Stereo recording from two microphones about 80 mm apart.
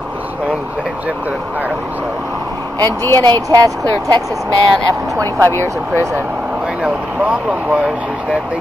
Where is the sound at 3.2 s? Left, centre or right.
Right.